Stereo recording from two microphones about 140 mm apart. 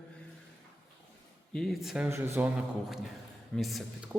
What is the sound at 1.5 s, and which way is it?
Speech, centre (ahead or behind).